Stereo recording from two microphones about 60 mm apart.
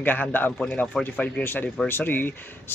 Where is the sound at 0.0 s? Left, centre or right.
Left.